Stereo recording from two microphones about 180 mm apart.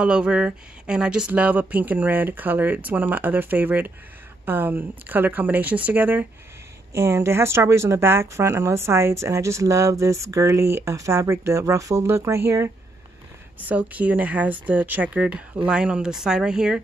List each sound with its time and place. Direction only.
0.0 s speech: 5° right (ahead or behind)